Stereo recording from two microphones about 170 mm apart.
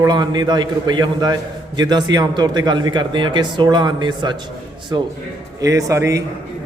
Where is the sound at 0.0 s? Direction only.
25° right (ahead or behind).